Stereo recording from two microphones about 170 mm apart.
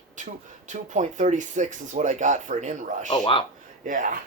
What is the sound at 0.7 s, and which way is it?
Speech, 45° right (ahead or behind).